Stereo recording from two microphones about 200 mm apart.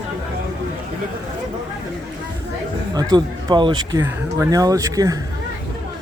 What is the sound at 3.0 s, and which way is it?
Speech, 20° right (ahead or behind).